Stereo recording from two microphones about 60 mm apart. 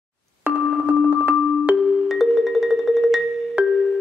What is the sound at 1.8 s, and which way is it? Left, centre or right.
Music, centre.